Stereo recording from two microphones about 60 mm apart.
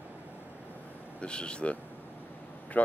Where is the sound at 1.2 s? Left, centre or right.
Centre.